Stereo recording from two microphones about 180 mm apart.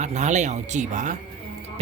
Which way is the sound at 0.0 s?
40° right (ahead or behind).